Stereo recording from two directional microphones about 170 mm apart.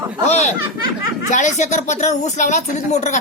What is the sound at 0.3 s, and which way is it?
Speech, 40° left (ahead or behind).